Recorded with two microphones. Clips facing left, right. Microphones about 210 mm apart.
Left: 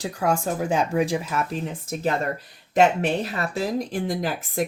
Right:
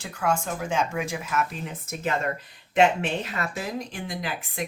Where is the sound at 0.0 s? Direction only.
35° left (ahead or behind).